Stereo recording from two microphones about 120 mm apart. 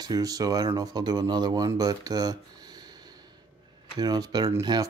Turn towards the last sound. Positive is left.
turn(degrees=-35)  # may be behind; listen again after turning